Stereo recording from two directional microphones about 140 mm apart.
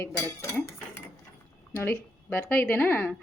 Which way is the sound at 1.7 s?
15° left (ahead or behind).